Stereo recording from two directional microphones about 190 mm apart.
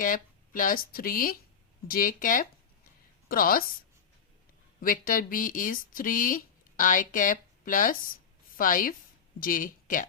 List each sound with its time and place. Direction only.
0.0 s speech: 45° left (ahead or behind)
4.8 s a woman's voice: 45° left (ahead or behind)